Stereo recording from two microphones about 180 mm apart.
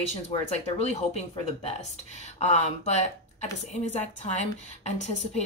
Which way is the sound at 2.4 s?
40° left (ahead or behind).